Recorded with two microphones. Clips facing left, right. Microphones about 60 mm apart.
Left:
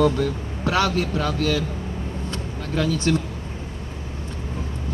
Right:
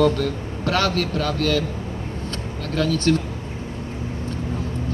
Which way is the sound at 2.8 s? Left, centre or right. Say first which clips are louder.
Right 2 dB; centre.